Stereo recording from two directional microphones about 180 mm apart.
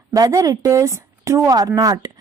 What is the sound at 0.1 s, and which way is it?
Speech, 15° right (ahead or behind).